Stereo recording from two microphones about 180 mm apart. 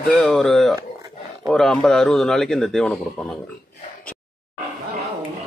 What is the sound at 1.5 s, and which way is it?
A man's voice, 5° left (ahead or behind).